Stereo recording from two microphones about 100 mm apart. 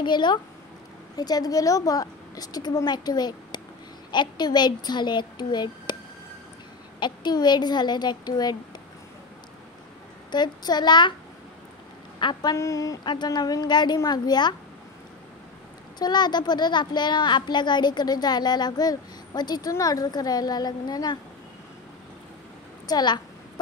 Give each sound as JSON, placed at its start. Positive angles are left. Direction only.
{"t": 0.0, "sound": "a child's voice", "side_deg": 50}
{"t": 7.0, "sound": "a child's voice", "side_deg": 45}
{"t": 10.3, "sound": "a child's voice", "side_deg": 45}
{"t": 12.2, "sound": "a child's voice", "side_deg": 45}
{"t": 12.5, "sound": "a woman's voice", "side_deg": 30}
{"t": 13.0, "sound": "a child's voice", "side_deg": 50}
{"t": 16.0, "sound": "a child's voice", "side_deg": 45}
{"t": 22.8, "sound": "a child's voice", "side_deg": 45}